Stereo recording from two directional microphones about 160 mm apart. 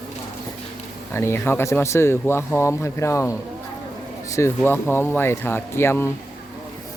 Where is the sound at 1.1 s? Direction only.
15° left (ahead or behind).